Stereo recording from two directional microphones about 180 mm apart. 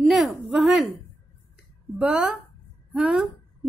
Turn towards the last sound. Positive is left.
turn(degrees=-5)  # may be behind; listen again after turning